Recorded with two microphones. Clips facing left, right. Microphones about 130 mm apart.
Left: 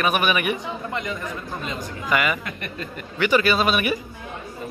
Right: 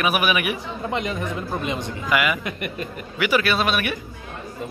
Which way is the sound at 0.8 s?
20° right (ahead or behind).